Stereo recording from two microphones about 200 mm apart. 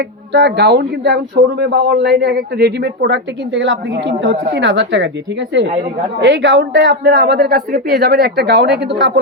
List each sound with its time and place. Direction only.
0.3 s speech: 60° right (ahead or behind)
6.1 s speech: 60° right (ahead or behind)